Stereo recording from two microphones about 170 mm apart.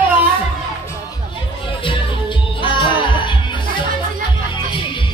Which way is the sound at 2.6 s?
30° left (ahead or behind).